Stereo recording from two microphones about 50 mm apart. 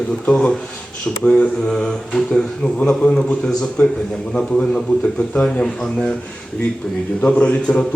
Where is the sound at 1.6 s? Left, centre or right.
Centre.